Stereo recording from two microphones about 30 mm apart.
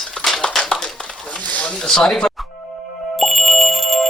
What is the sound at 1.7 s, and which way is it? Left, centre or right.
Speech, left.